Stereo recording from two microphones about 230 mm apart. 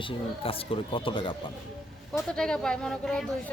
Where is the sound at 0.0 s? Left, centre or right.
Left.